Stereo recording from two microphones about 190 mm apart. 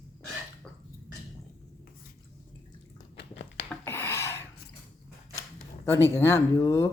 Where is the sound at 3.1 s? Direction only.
65° left (ahead or behind).